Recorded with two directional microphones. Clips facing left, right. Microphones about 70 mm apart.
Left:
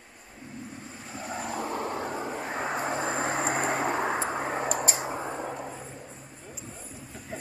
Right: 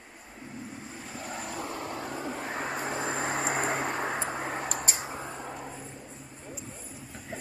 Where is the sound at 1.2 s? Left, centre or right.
Centre.